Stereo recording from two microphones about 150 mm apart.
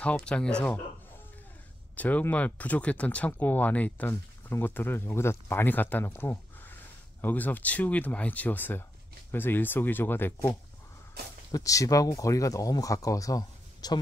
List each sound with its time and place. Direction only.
0.0 s speech: 5° left (ahead or behind)
2.0 s speech: 10° left (ahead or behind); by 13.9 s 25° left (ahead or behind)